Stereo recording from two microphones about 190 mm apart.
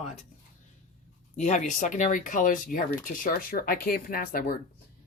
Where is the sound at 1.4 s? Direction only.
40° left (ahead or behind).